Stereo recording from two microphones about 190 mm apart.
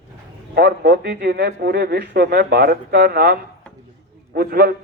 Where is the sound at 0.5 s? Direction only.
60° right (ahead or behind).